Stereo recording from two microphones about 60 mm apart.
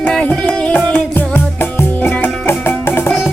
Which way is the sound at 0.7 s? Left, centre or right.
Left.